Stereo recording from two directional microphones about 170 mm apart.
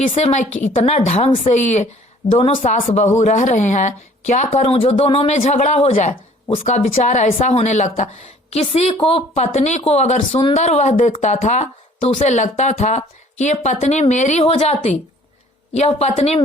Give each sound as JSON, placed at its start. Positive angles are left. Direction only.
{"t": 0.0, "sound": "speech", "side_deg": 45}
{"t": 2.6, "sound": "speech", "side_deg": 55}
{"t": 10.3, "sound": "speech", "side_deg": 30}
{"t": 10.6, "sound": "speech", "side_deg": 40}